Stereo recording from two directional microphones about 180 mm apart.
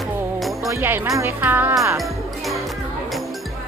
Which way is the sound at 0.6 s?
15° right (ahead or behind).